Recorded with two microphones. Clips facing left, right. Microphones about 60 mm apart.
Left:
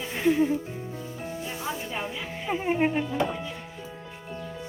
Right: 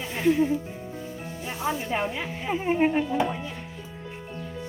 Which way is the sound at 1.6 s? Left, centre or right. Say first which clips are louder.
Right 7 dB; right.